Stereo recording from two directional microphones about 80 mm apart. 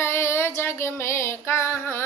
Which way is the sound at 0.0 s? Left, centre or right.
Left.